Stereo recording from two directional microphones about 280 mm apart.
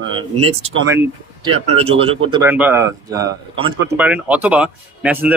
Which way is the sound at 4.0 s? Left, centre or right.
Centre.